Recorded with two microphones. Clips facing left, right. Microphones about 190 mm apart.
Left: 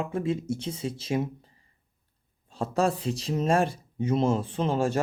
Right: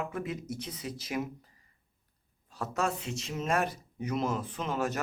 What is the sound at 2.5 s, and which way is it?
Speech, 30° left (ahead or behind).